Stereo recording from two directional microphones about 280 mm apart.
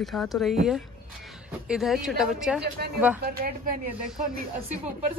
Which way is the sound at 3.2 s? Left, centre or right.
Right.